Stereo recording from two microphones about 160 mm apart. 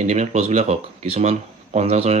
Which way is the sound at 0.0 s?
45° right (ahead or behind).